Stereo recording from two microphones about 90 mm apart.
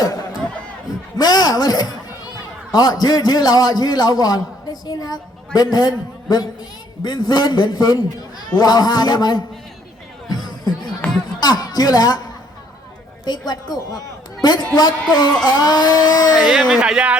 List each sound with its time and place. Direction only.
0.0 s music: 40° left (ahead or behind)
1.2 s a man's voice: 50° left (ahead or behind)
11.0 s music: 15° left (ahead or behind)
11.3 s speech: 50° left (ahead or behind)
13.2 s a man's voice: 50° left (ahead or behind)
16.3 s speech: 10° right (ahead or behind)